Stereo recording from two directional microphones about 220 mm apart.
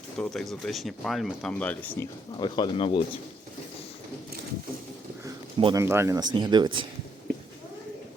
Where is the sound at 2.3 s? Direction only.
20° left (ahead or behind).